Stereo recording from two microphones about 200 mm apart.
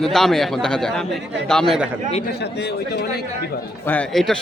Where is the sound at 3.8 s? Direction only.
5° left (ahead or behind).